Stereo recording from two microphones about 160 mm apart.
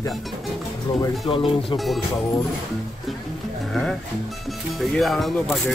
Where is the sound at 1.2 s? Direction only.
30° left (ahead or behind).